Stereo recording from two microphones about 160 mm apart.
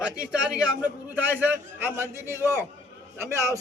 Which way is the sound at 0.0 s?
5° right (ahead or behind).